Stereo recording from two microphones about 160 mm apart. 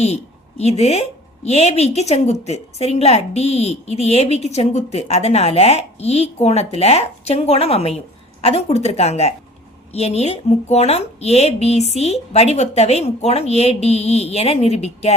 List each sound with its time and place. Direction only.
0.0 s a woman's voice: 45° left (ahead or behind)